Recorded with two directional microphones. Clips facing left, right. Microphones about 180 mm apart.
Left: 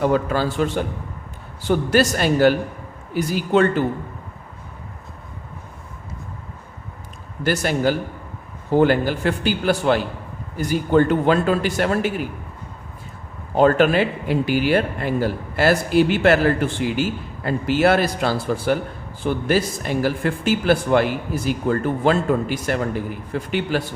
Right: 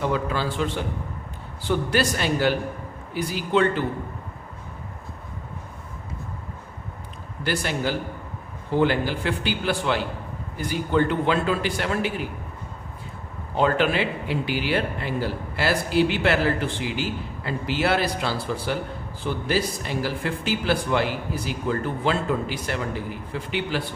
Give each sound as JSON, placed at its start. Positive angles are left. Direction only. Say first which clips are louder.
{"t": 0.0, "sound": "speech", "louder": "left 6 dB", "side_deg": 50}
{"t": 7.4, "sound": "speech", "louder": "left 6 dB", "side_deg": 45}
{"t": 13.6, "sound": "speech", "louder": "left 6 dB", "side_deg": 45}